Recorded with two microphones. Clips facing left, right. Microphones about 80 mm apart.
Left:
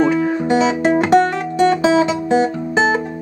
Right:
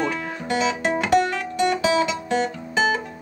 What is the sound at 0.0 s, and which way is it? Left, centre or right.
Music, centre.